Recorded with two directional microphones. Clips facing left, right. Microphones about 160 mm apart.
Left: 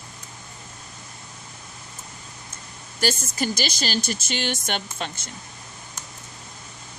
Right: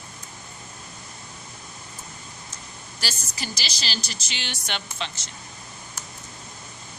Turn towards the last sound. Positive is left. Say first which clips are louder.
# left 3 dB
turn(degrees=50)  # may be behind; listen again after turning